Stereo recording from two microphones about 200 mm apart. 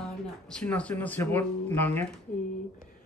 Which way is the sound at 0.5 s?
5° left (ahead or behind).